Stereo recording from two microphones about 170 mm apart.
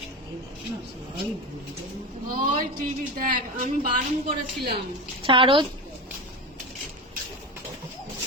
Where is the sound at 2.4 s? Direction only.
55° right (ahead or behind).